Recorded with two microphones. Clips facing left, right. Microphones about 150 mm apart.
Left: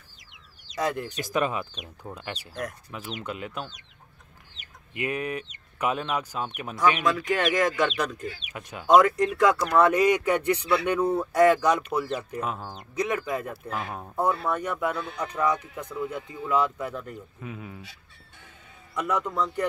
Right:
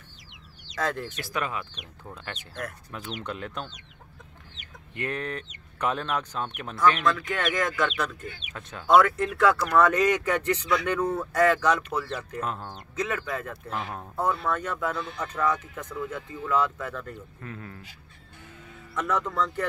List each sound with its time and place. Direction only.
0.7 s speech: 15° left (ahead or behind)
4.9 s speech: 10° left (ahead or behind)
18.9 s speech: 10° left (ahead or behind)